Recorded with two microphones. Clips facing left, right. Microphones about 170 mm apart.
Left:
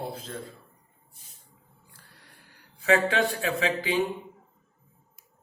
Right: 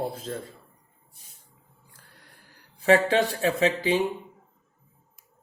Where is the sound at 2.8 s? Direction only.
35° right (ahead or behind).